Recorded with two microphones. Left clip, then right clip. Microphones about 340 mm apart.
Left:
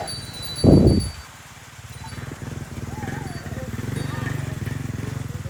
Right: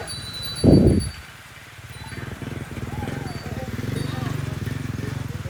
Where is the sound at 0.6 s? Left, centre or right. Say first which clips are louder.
Left 1 dB; centre.